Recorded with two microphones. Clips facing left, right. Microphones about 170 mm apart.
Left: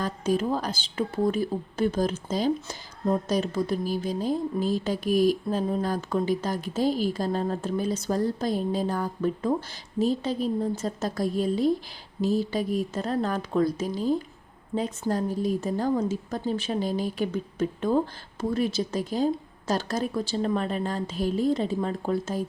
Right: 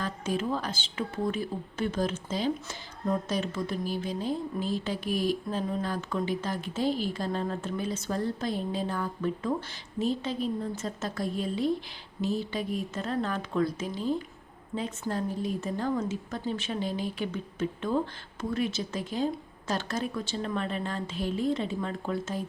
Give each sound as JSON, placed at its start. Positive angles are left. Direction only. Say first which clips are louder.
{"t": 0.0, "sound": "speech", "louder": "left 5 dB", "side_deg": 40}